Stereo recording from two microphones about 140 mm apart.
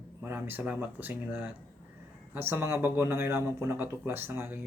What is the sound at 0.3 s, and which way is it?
Speech, 15° right (ahead or behind).